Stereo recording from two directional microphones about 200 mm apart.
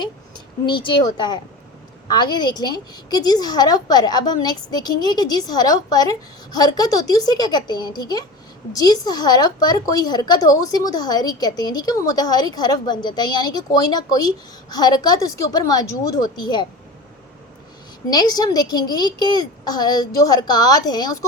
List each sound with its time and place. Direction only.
0.0 s a woman's voice: 20° left (ahead or behind)
18.1 s a woman's voice: 20° left (ahead or behind)